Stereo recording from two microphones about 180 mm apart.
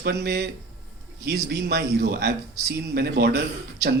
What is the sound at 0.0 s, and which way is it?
Speech, 65° right (ahead or behind).